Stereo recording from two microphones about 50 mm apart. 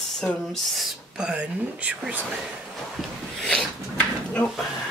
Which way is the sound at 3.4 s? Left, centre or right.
Centre.